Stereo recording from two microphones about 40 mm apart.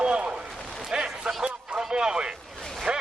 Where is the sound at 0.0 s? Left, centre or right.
Right.